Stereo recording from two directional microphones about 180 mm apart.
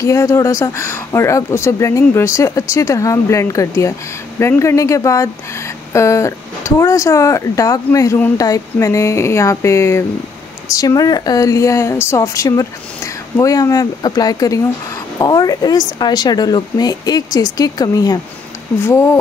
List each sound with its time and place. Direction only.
0.0 s a woman's voice: 15° left (ahead or behind)